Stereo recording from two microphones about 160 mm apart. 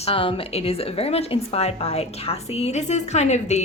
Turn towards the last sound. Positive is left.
turn(degrees=45)  # may be behind; listen again after turning